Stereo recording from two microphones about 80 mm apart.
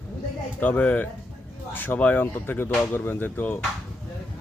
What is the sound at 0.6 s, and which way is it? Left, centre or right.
Speech, left.